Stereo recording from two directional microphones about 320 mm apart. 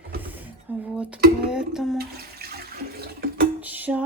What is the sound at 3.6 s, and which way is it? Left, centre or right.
Music, centre.